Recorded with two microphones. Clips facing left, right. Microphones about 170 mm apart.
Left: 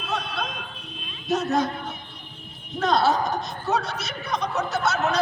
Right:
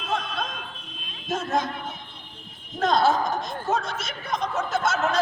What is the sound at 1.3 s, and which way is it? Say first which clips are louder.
Speech: left 3 dB; 50° right (ahead or behind).